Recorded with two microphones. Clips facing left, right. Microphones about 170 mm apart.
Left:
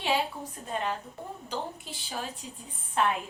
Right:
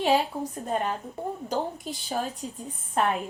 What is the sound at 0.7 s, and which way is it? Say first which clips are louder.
Speech: right 3 dB; 45° right (ahead or behind).